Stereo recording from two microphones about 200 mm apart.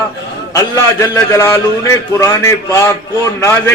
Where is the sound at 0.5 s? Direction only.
15° left (ahead or behind).